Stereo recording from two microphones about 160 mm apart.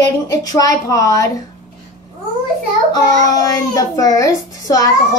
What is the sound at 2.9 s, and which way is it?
A child's voice, 20° left (ahead or behind).